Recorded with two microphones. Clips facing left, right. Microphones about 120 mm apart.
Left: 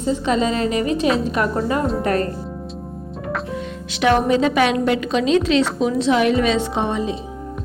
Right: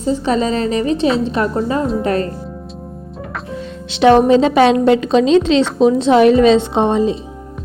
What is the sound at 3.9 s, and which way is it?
A woman's voice, 25° right (ahead or behind).